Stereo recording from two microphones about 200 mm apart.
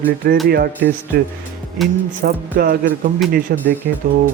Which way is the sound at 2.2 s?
50° right (ahead or behind).